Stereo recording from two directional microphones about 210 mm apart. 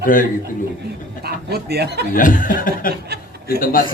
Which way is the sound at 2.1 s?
40° left (ahead or behind).